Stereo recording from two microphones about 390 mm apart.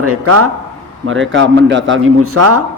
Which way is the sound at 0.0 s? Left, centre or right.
Right.